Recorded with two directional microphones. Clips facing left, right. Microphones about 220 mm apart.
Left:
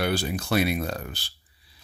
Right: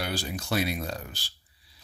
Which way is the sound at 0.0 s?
60° left (ahead or behind).